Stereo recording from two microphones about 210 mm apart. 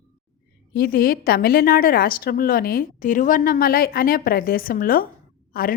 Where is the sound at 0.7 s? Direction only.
45° left (ahead or behind).